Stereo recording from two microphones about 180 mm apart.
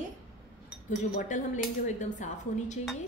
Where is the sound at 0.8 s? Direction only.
45° left (ahead or behind).